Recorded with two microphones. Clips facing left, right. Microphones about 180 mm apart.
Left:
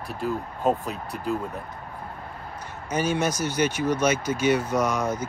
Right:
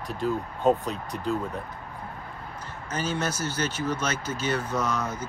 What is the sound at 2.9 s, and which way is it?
Speech, 10° left (ahead or behind).